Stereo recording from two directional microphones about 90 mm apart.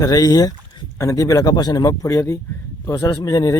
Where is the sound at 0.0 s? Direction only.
45° left (ahead or behind).